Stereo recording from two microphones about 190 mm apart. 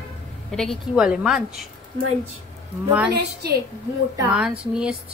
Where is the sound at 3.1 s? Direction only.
60° right (ahead or behind).